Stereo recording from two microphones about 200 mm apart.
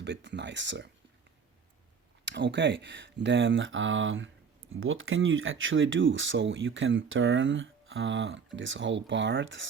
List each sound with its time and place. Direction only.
0.0 s speech: 60° right (ahead or behind)
2.2 s speech: 60° right (ahead or behind)
4.7 s speech: 85° right; by 9.6 s 70° right (ahead or behind)